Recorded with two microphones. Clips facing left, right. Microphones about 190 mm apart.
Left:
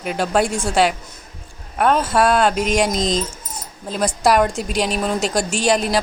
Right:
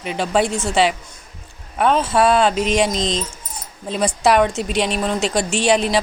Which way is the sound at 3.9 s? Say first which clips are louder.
Right 1 dB; centre (ahead or behind).